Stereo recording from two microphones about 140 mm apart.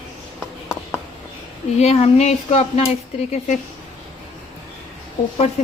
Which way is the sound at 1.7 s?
50° left (ahead or behind).